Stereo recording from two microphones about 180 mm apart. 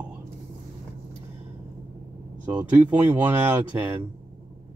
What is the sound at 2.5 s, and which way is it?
Speech, 10° right (ahead or behind).